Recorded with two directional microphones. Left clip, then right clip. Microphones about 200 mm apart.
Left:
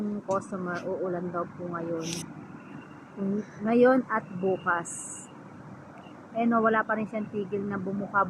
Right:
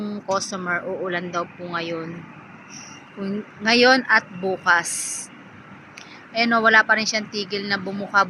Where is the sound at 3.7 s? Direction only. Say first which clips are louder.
Right 6 dB; 5° right (ahead or behind).